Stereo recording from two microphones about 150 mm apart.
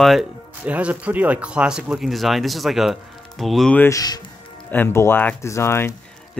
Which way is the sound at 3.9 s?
25° left (ahead or behind).